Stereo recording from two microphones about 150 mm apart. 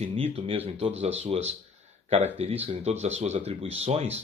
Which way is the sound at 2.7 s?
45° right (ahead or behind).